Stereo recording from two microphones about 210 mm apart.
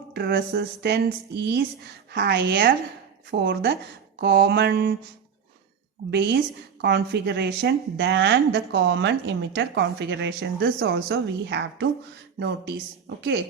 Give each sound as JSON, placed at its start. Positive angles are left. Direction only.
{"t": 0.1, "sound": "a woman's voice", "side_deg": -50}
{"t": 6.1, "sound": "a woman's voice", "side_deg": -55}